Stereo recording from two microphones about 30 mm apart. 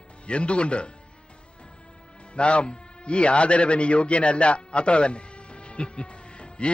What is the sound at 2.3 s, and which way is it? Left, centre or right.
A man's voice, left.